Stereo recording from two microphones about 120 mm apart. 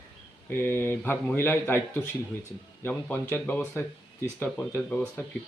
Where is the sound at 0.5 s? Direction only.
20° left (ahead or behind).